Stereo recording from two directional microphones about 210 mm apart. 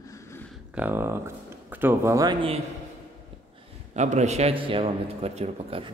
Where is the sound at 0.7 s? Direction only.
10° right (ahead or behind).